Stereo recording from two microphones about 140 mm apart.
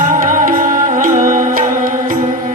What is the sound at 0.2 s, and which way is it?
Music, 75° right (ahead or behind).